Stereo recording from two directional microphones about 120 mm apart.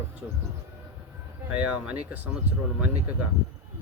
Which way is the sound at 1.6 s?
10° right (ahead or behind).